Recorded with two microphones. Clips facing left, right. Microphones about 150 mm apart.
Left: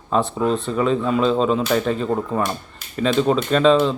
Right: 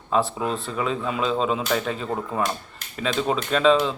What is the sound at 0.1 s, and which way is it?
Speech, 5° right (ahead or behind).